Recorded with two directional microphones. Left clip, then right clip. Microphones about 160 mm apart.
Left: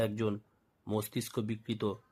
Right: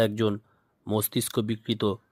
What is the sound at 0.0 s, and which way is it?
Speech, 40° right (ahead or behind).